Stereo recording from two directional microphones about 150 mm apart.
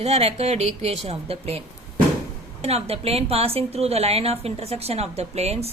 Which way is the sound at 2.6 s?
45° right (ahead or behind).